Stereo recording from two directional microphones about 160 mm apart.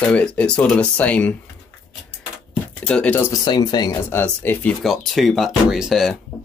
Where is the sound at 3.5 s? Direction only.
25° left (ahead or behind).